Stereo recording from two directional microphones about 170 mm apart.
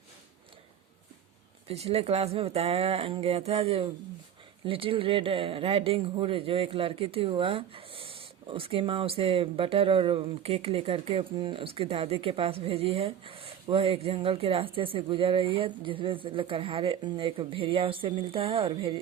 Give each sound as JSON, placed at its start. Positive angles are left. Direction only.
{"t": 1.6, "sound": "speech", "side_deg": -35}